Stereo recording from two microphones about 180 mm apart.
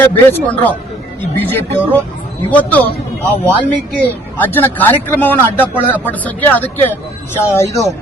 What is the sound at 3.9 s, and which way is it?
Speech, 10° left (ahead or behind).